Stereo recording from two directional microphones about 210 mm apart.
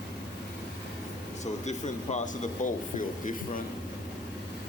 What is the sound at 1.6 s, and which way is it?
Speech, 35° left (ahead or behind).